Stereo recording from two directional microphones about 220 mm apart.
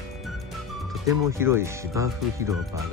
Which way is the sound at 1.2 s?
10° right (ahead or behind).